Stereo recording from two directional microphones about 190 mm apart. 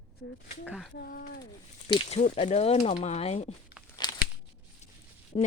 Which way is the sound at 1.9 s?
30° left (ahead or behind).